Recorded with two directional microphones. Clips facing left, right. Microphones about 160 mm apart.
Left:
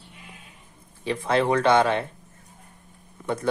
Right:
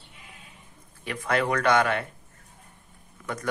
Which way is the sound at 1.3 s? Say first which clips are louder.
Left 3 dB; 25° left (ahead or behind).